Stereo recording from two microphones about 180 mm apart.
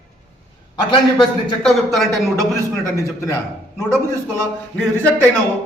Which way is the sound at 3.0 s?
15° left (ahead or behind).